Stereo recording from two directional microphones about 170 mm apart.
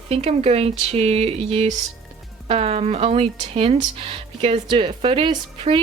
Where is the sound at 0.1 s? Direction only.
35° right (ahead or behind).